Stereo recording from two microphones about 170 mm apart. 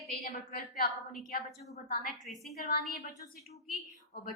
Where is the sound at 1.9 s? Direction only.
60° left (ahead or behind).